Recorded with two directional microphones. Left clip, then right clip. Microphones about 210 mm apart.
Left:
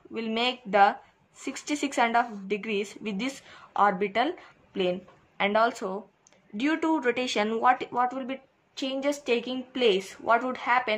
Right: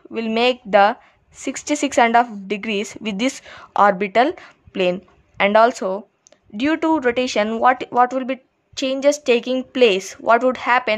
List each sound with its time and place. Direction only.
0.1 s speech: 50° right (ahead or behind)